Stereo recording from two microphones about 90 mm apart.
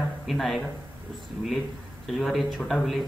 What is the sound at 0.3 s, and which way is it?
Speech, centre (ahead or behind).